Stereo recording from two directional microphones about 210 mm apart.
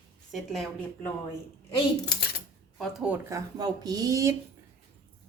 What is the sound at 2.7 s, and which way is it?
A woman's voice, centre (ahead or behind).